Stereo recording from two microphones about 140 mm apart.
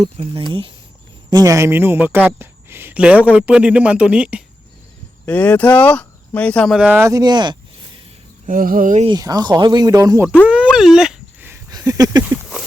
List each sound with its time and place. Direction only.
0.0 s speech: 40° right (ahead or behind)
1.3 s speech: 25° right (ahead or behind); by 4.4 s 10° right (ahead or behind)
5.2 s speech: 10° left (ahead or behind)
6.7 s speech: 10° right (ahead or behind)
7.1 s speech: 30° right (ahead or behind)
8.4 s speech: 80° right
9.0 s speech: 30° right (ahead or behind)
10.4 s a sound: 10° right (ahead or behind)
11.7 s a sound: 25° right (ahead or behind)